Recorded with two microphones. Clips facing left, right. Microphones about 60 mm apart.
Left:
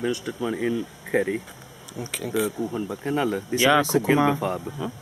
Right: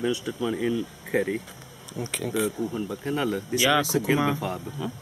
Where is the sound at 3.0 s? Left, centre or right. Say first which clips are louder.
Left 3 dB; centre.